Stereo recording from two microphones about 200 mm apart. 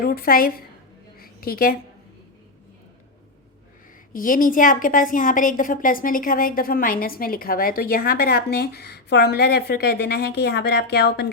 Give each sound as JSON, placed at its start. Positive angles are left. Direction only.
{"t": 0.0, "sound": "a woman's voice", "side_deg": 50}
{"t": 1.2, "sound": "a sound", "side_deg": 45}
{"t": 4.1, "sound": "a woman's voice", "side_deg": 45}